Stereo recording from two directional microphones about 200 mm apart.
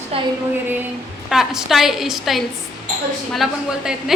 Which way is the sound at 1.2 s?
Centre (ahead or behind).